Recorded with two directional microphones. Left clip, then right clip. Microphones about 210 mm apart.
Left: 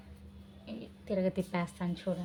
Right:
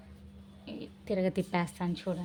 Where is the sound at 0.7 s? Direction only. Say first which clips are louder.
Right 2 dB; 40° right (ahead or behind).